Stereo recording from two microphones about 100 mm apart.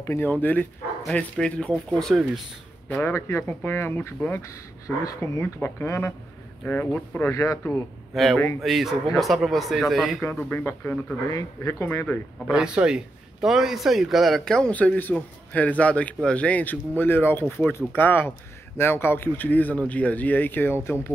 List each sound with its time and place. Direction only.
0.0 s a man's voice: 25° left (ahead or behind); by 2.4 s 5° left (ahead or behind)
2.9 s speech: 25° left (ahead or behind)
7.2 s speech: 30° left (ahead or behind)
8.1 s a man's voice: centre (ahead or behind)
10.2 s speech: 25° left (ahead or behind)
12.4 s a man's voice: 10° right (ahead or behind); by 21.1 s 25° left (ahead or behind)